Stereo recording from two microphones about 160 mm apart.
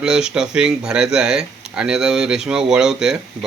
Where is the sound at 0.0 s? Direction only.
5° right (ahead or behind).